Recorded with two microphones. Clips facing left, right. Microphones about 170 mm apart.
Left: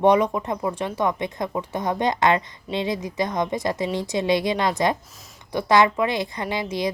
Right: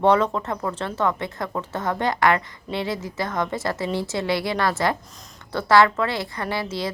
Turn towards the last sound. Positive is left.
turn(degrees=15)  # may be behind; listen again after turning